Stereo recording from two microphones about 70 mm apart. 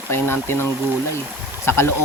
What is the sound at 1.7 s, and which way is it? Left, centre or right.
Speech, left.